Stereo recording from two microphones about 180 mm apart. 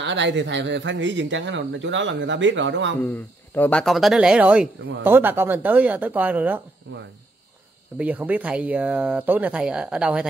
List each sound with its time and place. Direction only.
0.0 s speech: 80° right
3.0 s speech: 10° left (ahead or behind); by 6.6 s 10° right (ahead or behind)
8.0 s speech: 10° right (ahead or behind)